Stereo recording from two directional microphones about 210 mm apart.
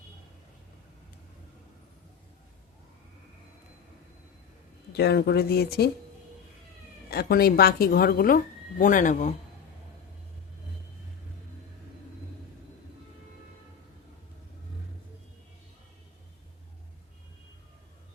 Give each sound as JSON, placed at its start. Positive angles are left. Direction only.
{"t": 4.9, "sound": "speech", "side_deg": 50}
{"t": 7.1, "sound": "speech", "side_deg": 45}